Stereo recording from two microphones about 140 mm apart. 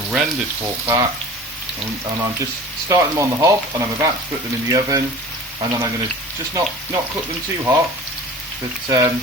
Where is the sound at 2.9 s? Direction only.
25° right (ahead or behind).